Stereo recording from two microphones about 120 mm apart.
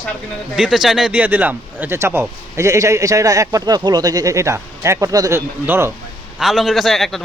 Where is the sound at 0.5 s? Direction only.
5° right (ahead or behind); by 5.9 s 20° right (ahead or behind).